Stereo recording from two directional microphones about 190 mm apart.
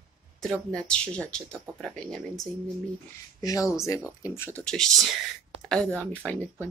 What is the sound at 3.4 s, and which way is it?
Speech, 15° left (ahead or behind).